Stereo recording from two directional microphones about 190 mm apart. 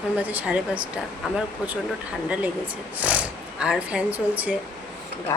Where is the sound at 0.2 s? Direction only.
10° right (ahead or behind).